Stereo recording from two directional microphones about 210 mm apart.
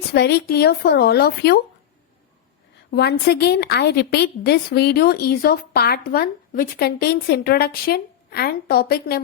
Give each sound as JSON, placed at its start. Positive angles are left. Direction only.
{"t": 0.1, "sound": "a woman's voice", "side_deg": 50}
{"t": 2.9, "sound": "a woman's voice", "side_deg": 50}